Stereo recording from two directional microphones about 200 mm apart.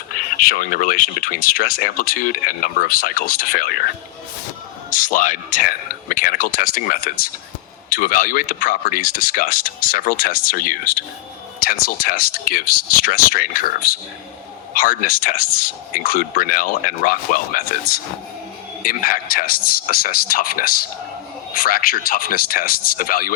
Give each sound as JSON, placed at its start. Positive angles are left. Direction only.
{"t": 0.1, "sound": "speech", "side_deg": 45}
{"t": 4.9, "sound": "speech", "side_deg": 40}